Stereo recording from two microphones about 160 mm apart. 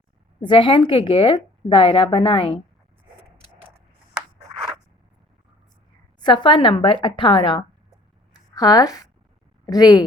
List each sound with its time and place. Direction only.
0.4 s a woman's voice: 30° left (ahead or behind)
6.1 s a woman's voice: 30° left (ahead or behind)